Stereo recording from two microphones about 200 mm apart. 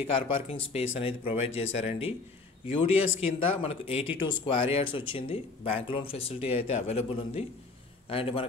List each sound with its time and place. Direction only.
0.0 s speech: 30° left (ahead or behind)
3.2 s speech: 30° left (ahead or behind)